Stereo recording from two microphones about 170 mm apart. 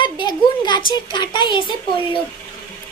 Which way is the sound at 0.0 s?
25° left (ahead or behind).